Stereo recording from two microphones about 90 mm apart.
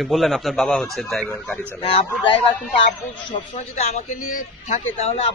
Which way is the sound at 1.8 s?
90° left.